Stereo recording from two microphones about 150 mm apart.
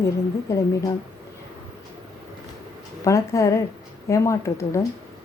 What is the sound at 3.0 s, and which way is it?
A woman's voice, 20° left (ahead or behind).